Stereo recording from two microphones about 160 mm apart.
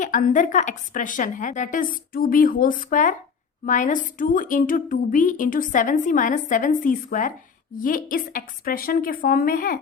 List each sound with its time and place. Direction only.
0.0 s a woman's voice: 55° left (ahead or behind)